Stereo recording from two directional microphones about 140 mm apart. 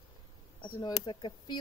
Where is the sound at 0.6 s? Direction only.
35° left (ahead or behind).